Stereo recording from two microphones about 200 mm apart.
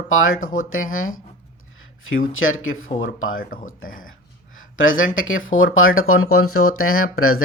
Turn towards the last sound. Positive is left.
turn(degrees=90)